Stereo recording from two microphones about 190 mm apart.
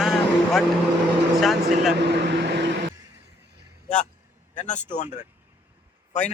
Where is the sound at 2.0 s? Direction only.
65° right (ahead or behind).